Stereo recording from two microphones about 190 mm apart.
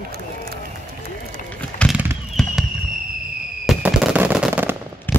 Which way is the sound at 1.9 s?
10° right (ahead or behind).